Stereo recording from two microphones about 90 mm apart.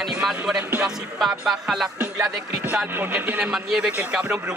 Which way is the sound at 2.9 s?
20° right (ahead or behind).